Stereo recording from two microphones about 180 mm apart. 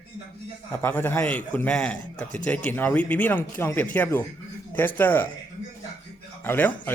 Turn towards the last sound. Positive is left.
turn(degrees=10)  # may be behind; listen again after turning